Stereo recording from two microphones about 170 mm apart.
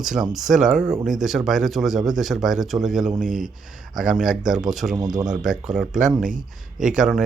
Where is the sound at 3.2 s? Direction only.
50° right (ahead or behind).